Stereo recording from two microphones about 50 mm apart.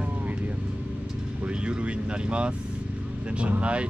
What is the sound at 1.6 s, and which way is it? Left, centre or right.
Speech, right.